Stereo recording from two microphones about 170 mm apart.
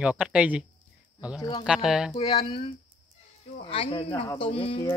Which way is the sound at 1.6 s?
5° right (ahead or behind).